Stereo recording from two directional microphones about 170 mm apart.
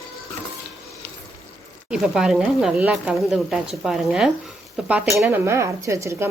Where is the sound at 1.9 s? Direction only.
5° right (ahead or behind).